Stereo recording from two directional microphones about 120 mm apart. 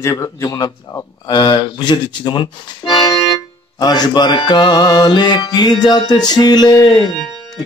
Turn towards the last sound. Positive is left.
turn(degrees=40)  # may be behind; listen again after turning